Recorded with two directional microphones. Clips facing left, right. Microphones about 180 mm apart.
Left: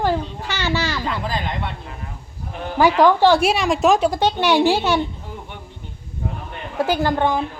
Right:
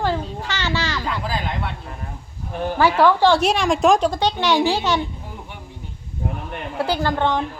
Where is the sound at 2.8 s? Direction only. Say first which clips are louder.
Left 2 dB; 15° left (ahead or behind).